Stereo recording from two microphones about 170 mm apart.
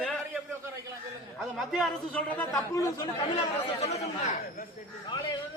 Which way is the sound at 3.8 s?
40° left (ahead or behind).